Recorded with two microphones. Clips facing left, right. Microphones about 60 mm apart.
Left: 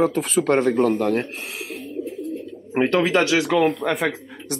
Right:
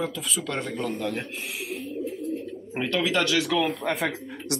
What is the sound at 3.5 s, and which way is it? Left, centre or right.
Speech, left.